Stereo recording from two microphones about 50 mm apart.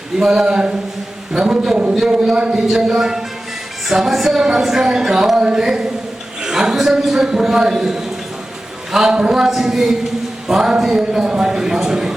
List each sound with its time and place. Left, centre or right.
0.2 s speech: centre
2.6 s speech: centre